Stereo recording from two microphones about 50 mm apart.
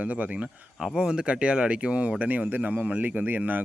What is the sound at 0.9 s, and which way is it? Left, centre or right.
A man's voice, centre.